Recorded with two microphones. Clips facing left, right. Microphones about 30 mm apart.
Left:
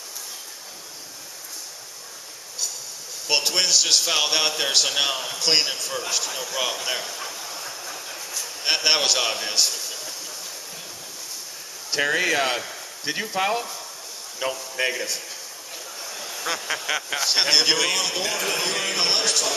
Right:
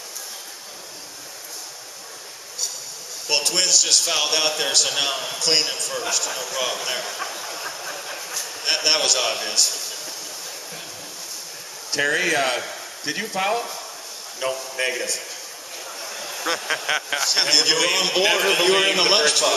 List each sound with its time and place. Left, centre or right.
3.3 s a man's voice: centre
5.4 s a man's voice: centre
7.1 s train: centre
8.6 s a man's voice: centre
9.7 s a sound: centre
11.9 s a man's voice: centre
16.0 s a sound: centre
17.3 s a man's voice: centre
18.5 s a man's voice: right